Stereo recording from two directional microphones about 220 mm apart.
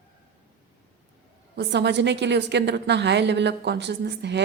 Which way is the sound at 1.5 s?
50° right (ahead or behind).